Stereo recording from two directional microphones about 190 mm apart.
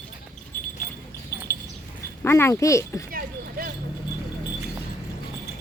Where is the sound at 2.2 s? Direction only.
10° left (ahead or behind).